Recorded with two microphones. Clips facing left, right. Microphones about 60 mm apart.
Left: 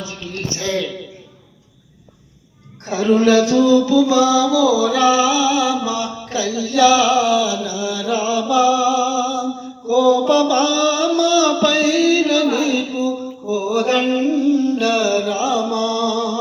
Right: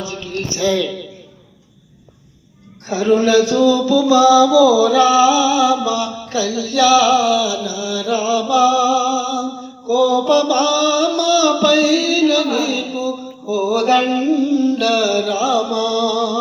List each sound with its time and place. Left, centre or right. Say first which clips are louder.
3.2 s a sound: left 2 dB; left
3.8 s music: even; left
4.1 s music: right 4 dB; right
6.0 s music: right 2 dB; left
6.5 s music: right 1 dB; right
6.7 s a sound: right 1 dB; left
9.9 s mantra: even; left
14.1 s music: even; centre